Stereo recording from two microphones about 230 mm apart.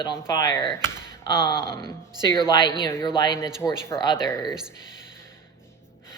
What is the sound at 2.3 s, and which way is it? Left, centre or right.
Speech, centre.